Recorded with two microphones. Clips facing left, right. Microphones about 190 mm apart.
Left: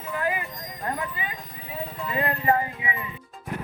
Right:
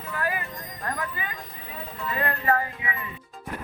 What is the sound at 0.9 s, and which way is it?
Speech, 15° left (ahead or behind).